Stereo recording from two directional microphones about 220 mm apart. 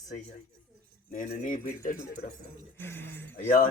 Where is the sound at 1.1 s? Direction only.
35° left (ahead or behind).